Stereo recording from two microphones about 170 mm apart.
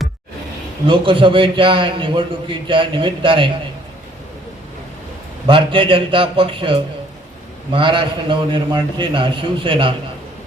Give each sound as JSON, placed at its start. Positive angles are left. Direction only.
{"t": 0.9, "sound": "a man's voice", "side_deg": -30}
{"t": 5.5, "sound": "a man's voice", "side_deg": -30}